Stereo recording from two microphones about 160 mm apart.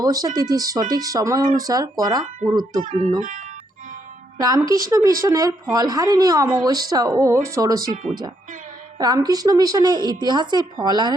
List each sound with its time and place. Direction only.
0.0 s speech: 25° right (ahead or behind)
3.2 s speech: 55° right (ahead or behind)
4.4 s speech: 25° right (ahead or behind)
9.0 s speech: 25° right (ahead or behind)